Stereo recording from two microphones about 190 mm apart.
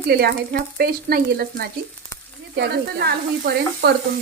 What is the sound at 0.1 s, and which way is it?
Speech, 55° right (ahead or behind).